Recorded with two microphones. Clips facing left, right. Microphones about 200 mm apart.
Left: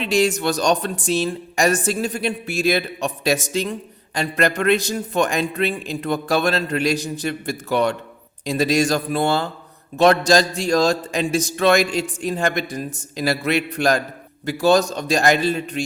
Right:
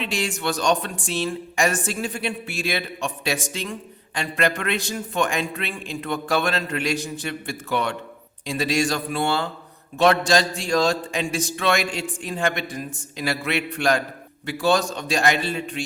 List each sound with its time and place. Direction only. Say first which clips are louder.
0.0 s speech: left 7 dB; 40° left (ahead or behind)